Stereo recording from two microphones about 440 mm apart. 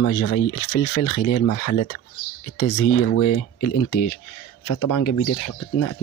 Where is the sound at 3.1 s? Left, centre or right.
Left.